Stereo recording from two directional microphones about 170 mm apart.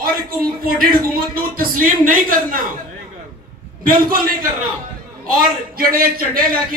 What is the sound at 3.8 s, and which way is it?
A man's voice, 55° right (ahead or behind).